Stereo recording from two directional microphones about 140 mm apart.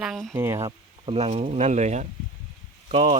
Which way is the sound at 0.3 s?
20° right (ahead or behind).